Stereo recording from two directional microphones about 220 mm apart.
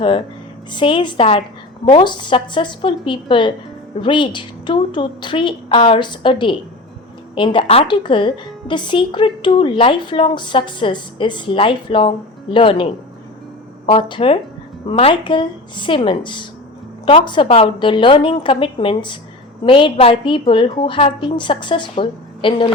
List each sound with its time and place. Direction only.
0.0 s a woman's voice: 25° left (ahead or behind)